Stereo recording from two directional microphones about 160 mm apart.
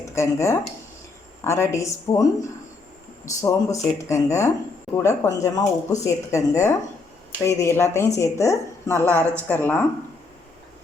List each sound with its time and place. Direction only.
0.1 s a woman's voice: 20° left (ahead or behind)